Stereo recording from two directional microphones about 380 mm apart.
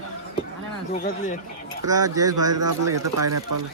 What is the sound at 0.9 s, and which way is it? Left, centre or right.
Speech, centre.